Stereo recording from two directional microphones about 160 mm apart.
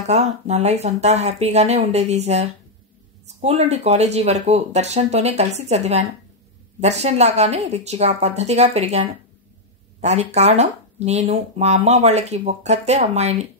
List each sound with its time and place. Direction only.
0.0 s speech: 45° right (ahead or behind)